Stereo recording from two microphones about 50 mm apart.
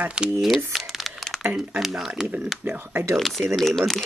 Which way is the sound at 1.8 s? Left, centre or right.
Centre.